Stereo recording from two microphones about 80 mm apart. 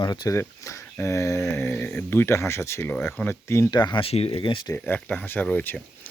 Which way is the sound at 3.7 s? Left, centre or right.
Left.